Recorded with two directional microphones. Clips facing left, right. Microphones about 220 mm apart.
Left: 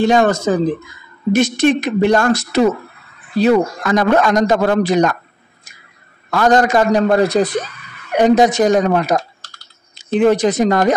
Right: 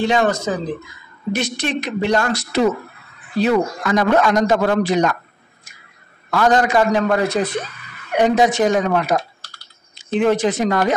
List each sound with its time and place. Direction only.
0.0 s a man's voice: 45° left (ahead or behind)
6.3 s a man's voice: 45° left (ahead or behind)